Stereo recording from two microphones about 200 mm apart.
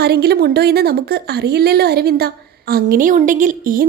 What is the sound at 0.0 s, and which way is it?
A woman's voice, 55° right (ahead or behind).